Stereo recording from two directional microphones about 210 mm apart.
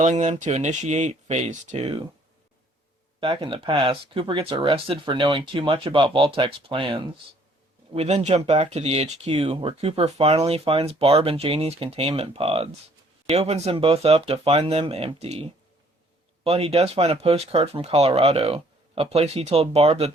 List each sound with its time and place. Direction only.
0.0 s speech: 35° right (ahead or behind)
3.2 s speech: 25° right (ahead or behind)